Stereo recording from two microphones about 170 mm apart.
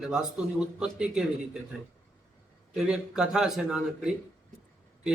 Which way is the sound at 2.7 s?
5° right (ahead or behind).